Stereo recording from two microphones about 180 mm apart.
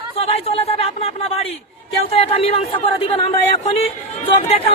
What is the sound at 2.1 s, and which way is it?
Speech, 35° left (ahead or behind).